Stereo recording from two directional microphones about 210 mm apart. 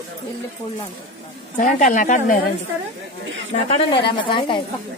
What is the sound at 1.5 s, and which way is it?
Speech, 40° left (ahead or behind).